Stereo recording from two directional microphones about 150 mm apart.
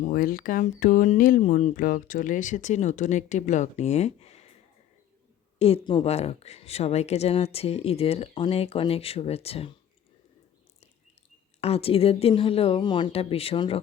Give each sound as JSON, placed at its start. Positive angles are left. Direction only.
{"t": 0.0, "sound": "speech", "side_deg": 70}
{"t": 5.5, "sound": "speech", "side_deg": 40}
{"t": 11.6, "sound": "speech", "side_deg": 40}